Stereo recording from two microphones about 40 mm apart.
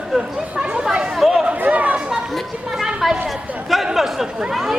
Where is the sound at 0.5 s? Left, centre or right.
Right.